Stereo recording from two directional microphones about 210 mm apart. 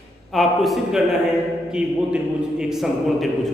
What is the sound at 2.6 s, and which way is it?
Speech, centre (ahead or behind).